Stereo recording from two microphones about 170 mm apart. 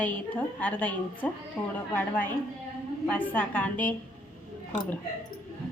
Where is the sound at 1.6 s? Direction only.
5° right (ahead or behind).